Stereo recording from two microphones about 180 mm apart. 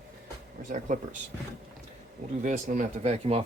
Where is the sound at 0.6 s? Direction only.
45° right (ahead or behind).